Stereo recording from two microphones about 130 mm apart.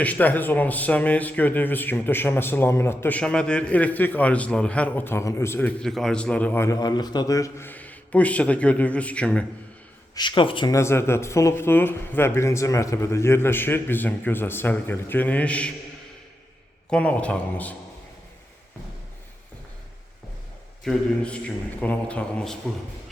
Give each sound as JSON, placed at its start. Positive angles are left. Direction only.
{"t": 0.0, "sound": "speech", "side_deg": 10}
{"t": 6.7, "sound": "speech", "side_deg": 30}
{"t": 10.2, "sound": "speech", "side_deg": 40}
{"t": 10.7, "sound": "speech", "side_deg": 20}
{"t": 16.9, "sound": "speech", "side_deg": 10}
{"t": 20.8, "sound": "speech", "side_deg": 5}